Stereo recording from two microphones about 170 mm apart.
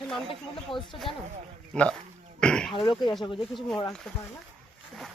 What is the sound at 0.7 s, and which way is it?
Speech, 30° left (ahead or behind).